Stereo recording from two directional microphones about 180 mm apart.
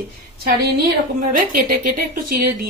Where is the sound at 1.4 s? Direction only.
50° right (ahead or behind).